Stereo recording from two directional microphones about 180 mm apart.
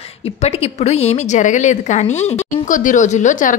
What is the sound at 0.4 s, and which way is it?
A woman's voice, 35° left (ahead or behind).